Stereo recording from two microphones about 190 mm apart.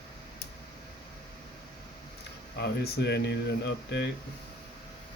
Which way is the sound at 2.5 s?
60° left (ahead or behind).